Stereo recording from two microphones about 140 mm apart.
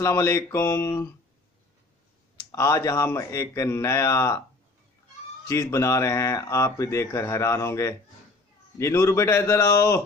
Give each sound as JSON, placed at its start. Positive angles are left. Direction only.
{"t": 0.0, "sound": "speech", "side_deg": 20}
{"t": 2.5, "sound": "speech", "side_deg": 20}
{"t": 5.5, "sound": "speech", "side_deg": 20}